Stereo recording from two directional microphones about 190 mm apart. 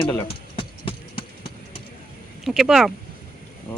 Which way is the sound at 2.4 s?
Centre (ahead or behind).